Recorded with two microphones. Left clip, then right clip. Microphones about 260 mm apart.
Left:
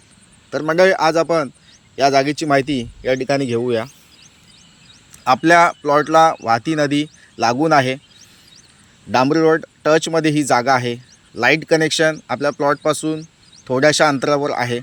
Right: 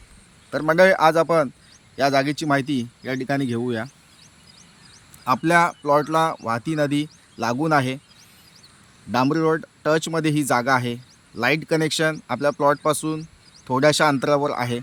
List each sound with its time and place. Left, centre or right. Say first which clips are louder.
0.5 s speech: left 2 dB; centre
5.2 s speech: left 6 dB; centre
9.1 s speech: left 6 dB; centre